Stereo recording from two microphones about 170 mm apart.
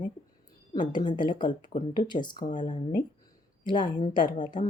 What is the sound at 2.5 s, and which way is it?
Speech, 45° left (ahead or behind).